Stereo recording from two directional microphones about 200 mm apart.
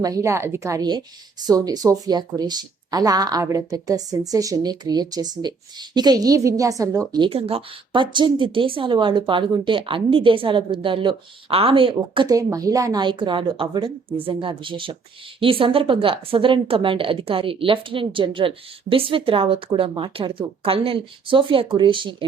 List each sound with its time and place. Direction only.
0.0 s speech: 15° right (ahead or behind)